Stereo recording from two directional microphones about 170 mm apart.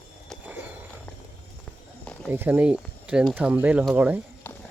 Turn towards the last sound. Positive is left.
turn(degrees=-10)  # may be behind; listen again after turning